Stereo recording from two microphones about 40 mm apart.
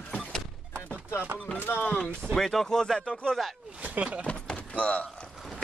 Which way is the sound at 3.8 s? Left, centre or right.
Right.